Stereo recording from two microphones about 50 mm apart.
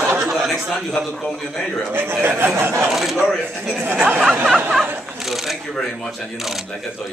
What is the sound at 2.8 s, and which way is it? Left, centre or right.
A man's voice, centre.